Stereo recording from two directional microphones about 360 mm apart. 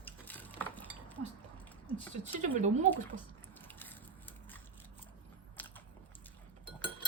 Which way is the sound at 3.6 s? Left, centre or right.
Centre.